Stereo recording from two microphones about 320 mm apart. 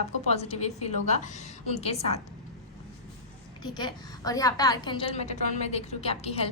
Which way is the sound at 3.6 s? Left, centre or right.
Centre.